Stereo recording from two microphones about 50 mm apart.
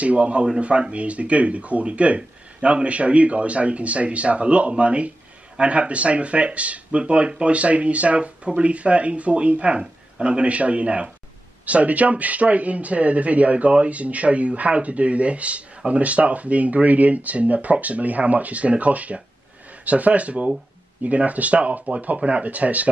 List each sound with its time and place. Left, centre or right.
0.0 s speech: right